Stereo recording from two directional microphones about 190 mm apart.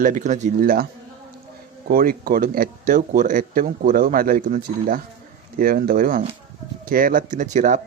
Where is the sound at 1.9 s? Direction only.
50° right (ahead or behind).